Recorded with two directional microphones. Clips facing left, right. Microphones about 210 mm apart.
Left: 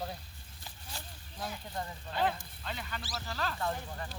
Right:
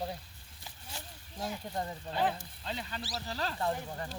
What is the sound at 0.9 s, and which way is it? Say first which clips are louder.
Speech: right 1 dB; 25° right (ahead or behind).